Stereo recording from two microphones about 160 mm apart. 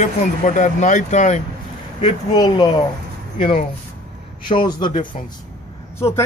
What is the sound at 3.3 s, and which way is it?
Speech, 40° left (ahead or behind).